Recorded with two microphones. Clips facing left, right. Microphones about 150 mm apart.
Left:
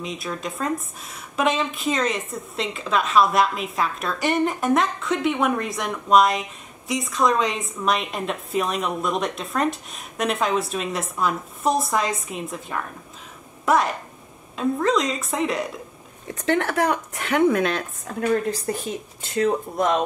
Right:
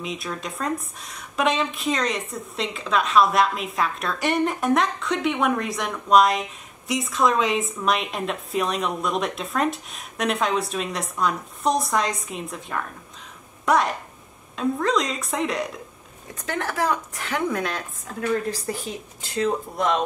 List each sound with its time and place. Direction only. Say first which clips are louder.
0.0 s a woman's voice: left 1 dB; centre (ahead or behind)
16.4 s a woman's voice: left 4 dB; 65° left (ahead or behind)